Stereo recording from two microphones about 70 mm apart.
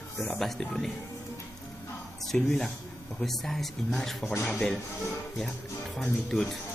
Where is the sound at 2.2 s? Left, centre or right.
Centre.